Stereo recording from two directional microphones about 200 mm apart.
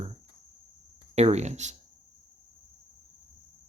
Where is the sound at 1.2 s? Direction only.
35° right (ahead or behind).